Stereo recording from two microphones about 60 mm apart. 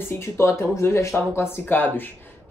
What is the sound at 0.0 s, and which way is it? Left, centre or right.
Speech, left.